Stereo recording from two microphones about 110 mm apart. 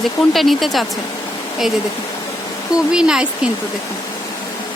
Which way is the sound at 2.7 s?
5° right (ahead or behind).